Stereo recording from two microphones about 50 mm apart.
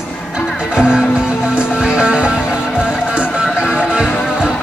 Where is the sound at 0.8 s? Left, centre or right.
Centre.